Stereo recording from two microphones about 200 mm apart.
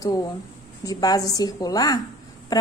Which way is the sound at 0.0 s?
15° left (ahead or behind).